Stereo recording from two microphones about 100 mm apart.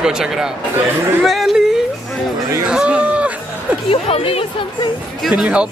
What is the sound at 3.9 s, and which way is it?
Speech, 70° left (ahead or behind).